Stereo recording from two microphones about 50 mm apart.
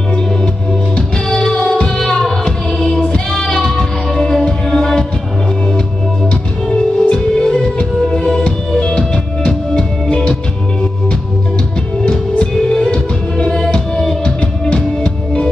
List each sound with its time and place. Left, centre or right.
0.9 s music: centre
6.7 s music: centre
12.0 s music: centre